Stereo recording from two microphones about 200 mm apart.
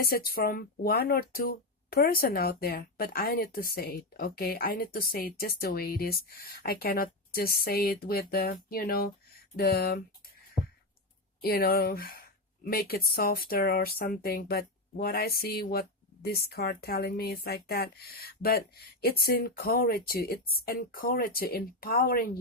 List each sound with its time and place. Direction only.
0.0 s speech: 50° left (ahead or behind)
11.4 s speech: 50° left (ahead or behind)